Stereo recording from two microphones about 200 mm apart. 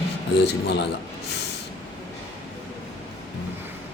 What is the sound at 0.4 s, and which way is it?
Speech, 55° left (ahead or behind).